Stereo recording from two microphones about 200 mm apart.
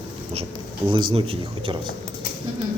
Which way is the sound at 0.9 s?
25° right (ahead or behind).